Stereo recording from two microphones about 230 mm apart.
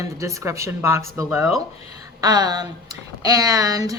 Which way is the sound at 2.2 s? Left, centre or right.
Centre.